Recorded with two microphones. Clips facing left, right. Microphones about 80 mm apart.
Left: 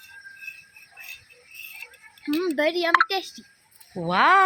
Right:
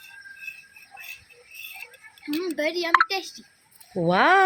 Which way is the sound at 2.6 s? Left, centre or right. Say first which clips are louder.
Even; left.